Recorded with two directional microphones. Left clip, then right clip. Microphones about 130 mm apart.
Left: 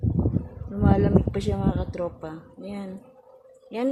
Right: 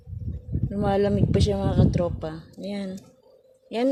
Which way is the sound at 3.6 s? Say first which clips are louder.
Right 3 dB; 30° right (ahead or behind).